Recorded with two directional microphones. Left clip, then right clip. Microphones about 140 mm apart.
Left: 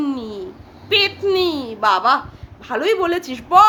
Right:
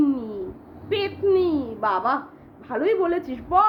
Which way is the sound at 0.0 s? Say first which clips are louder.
Right 1 dB; 30° left (ahead or behind).